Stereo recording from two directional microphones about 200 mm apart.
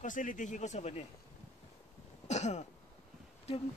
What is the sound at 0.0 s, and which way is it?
Speech, 40° left (ahead or behind).